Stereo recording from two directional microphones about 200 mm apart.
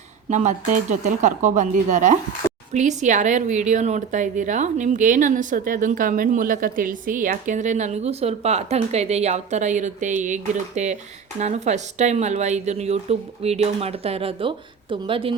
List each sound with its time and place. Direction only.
0.3 s speech: 35° right (ahead or behind)